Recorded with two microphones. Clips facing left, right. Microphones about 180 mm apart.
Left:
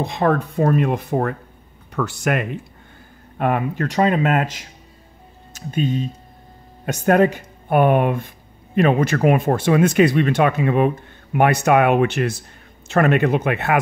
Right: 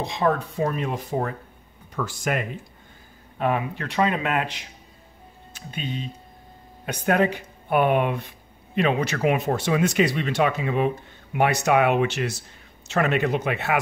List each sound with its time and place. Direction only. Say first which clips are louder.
0.0 s speech: left 4 dB; 55° left (ahead or behind)
3.3 s speech: left 4 dB; 50° left (ahead or behind)